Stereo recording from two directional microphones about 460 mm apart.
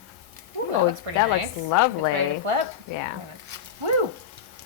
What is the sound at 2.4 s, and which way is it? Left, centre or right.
Speech, right.